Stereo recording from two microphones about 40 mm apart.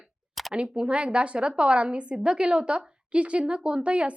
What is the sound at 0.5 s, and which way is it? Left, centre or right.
A woman's voice, right.